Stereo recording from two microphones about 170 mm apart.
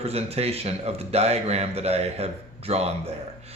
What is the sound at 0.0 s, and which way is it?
Speech, 35° right (ahead or behind).